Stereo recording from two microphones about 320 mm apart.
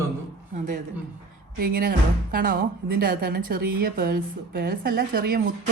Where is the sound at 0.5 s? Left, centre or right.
Right.